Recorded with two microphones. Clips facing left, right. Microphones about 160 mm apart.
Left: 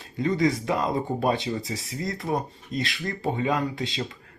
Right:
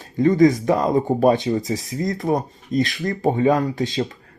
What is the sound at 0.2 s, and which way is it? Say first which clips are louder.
Speech: right 9 dB; 45° right (ahead or behind).